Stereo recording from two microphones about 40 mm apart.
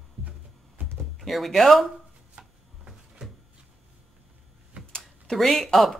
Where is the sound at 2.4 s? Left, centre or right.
Centre.